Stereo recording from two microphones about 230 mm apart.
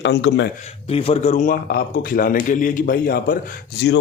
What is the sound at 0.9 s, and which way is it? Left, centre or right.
A man's voice, left.